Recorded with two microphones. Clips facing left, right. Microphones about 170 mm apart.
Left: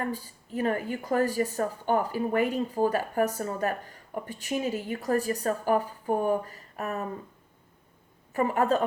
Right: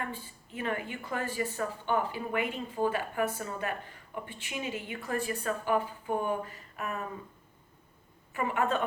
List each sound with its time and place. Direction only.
0.0 s speech: 40° left (ahead or behind)
8.3 s speech: 40° left (ahead or behind)